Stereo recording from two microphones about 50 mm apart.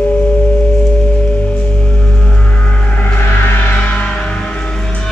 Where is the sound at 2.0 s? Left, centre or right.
Left.